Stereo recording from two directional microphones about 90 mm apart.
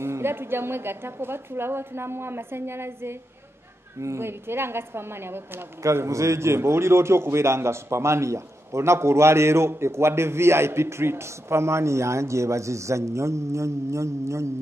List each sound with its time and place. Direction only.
0.0 s a woman's voice: 30° right (ahead or behind)